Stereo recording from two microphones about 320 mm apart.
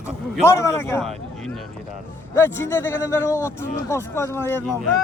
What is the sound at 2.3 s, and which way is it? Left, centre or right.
A man's voice, centre.